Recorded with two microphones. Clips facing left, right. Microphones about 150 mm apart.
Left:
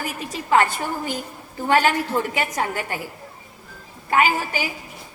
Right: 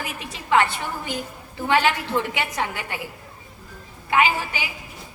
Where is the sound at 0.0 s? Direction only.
40° left (ahead or behind).